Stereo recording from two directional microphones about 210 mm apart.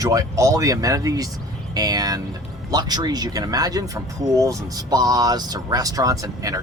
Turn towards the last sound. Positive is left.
turn(degrees=-15)  # may be behind; listen again after turning